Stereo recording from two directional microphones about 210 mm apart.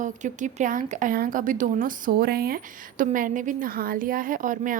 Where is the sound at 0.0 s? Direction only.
35° right (ahead or behind).